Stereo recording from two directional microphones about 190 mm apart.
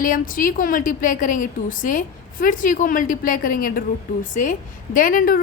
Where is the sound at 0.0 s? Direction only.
45° left (ahead or behind).